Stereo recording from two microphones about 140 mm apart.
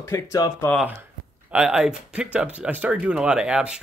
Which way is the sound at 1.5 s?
10° right (ahead or behind).